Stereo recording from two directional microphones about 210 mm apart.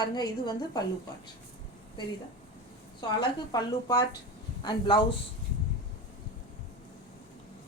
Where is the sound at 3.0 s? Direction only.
20° left (ahead or behind).